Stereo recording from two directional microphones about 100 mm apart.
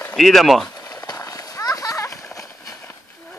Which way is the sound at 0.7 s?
40° left (ahead or behind).